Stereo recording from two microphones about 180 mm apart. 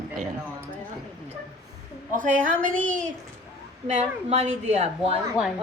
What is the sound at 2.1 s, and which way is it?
Speech, 45° right (ahead or behind).